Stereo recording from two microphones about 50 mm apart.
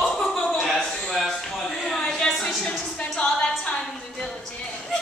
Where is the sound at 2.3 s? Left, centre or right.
Centre.